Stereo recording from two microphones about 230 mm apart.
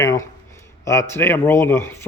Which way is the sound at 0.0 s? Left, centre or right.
Centre.